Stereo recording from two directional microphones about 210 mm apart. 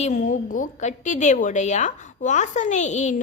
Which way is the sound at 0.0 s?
35° left (ahead or behind).